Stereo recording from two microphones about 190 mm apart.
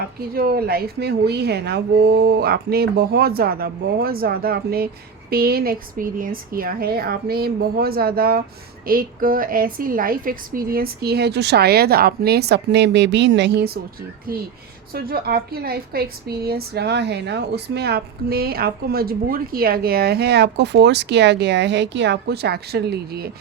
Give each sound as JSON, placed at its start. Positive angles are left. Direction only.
{"t": 0.3, "sound": "a woman's voice", "side_deg": -50}
{"t": 14.9, "sound": "a woman's voice", "side_deg": -55}